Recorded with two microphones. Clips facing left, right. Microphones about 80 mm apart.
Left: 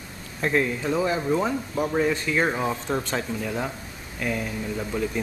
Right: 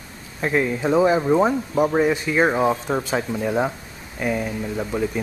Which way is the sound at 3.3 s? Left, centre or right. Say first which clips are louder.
Right 7 dB; right.